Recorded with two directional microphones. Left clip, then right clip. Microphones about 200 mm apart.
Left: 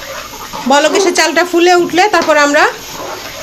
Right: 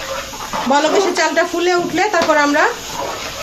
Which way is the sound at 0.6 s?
45° left (ahead or behind).